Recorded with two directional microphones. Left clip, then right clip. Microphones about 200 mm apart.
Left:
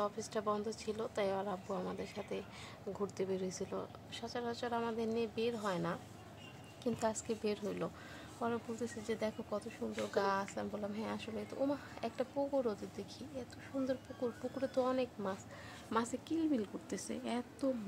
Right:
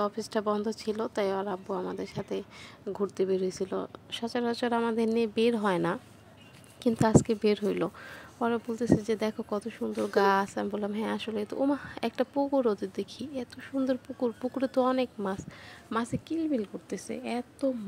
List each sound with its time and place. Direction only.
0.0 s a woman's voice: 30° right (ahead or behind)